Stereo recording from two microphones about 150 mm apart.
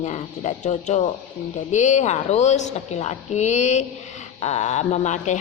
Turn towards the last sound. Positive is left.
turn(degrees=50)  # may be behind; listen again after turning